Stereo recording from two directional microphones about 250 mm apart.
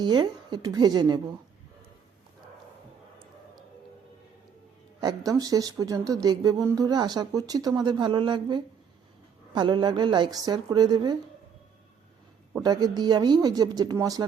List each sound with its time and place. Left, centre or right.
0.0 s speech: centre
4.9 s speech: centre
12.5 s speech: centre